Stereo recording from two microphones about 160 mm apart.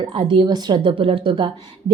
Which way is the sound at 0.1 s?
35° right (ahead or behind).